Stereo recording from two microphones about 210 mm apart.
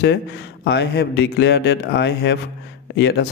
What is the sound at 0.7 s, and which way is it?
A man's voice, 55° left (ahead or behind).